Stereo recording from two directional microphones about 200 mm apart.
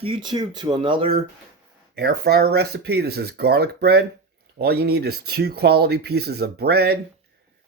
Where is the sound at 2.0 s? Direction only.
55° right (ahead or behind).